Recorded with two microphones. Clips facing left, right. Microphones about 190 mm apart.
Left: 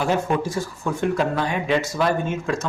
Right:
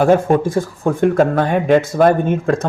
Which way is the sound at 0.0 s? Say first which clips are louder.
Right 9 dB; 50° right (ahead or behind).